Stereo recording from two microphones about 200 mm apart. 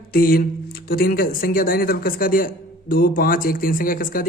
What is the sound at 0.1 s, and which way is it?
A man's voice, 50° left (ahead or behind).